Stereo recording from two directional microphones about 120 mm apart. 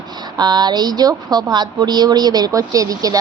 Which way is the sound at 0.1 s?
35° right (ahead or behind).